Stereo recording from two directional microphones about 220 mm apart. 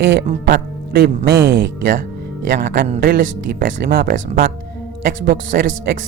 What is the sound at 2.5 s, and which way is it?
Speech, 45° right (ahead or behind).